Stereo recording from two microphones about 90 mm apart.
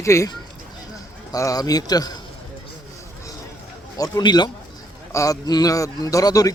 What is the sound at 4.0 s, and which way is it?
Speech, 50° left (ahead or behind).